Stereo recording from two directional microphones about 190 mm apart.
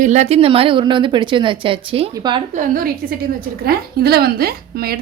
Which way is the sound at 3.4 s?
55° right (ahead or behind).